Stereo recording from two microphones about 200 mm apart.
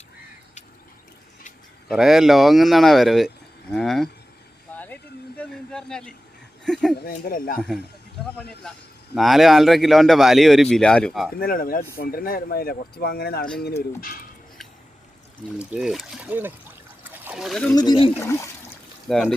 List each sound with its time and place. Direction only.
1.9 s speech: centre (ahead or behind)
4.7 s a sound: 10° left (ahead or behind)
5.4 s speech: 5° left (ahead or behind)
7.0 s speech: 45° left (ahead or behind)
8.7 s speech: 5° left (ahead or behind)
11.3 s speech: 45° left (ahead or behind)
15.5 s speech: 5° right (ahead or behind)
17.0 s wild animals: 10° right (ahead or behind)
17.7 s speech: 20° left (ahead or behind)
19.0 s speech: centre (ahead or behind)